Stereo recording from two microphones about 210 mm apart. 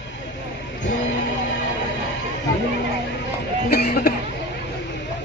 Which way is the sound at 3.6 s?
50° left (ahead or behind).